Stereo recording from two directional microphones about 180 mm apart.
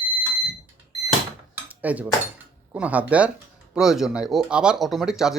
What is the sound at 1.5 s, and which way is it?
Dishes, 10° right (ahead or behind).